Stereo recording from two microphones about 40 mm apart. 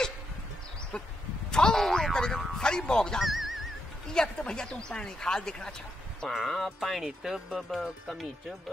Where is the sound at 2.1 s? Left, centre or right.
Centre.